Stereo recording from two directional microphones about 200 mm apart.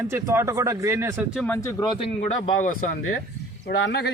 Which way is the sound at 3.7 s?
60° left (ahead or behind).